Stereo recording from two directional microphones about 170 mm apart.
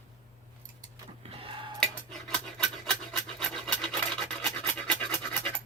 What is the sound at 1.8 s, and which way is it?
Cutlery, 5° left (ahead or behind).